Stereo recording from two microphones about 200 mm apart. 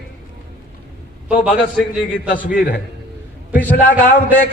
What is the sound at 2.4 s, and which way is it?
Speech, 50° left (ahead or behind).